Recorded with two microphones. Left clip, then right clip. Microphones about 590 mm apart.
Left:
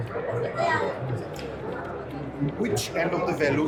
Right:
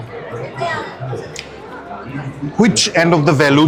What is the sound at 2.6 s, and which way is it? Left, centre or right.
Speech, right.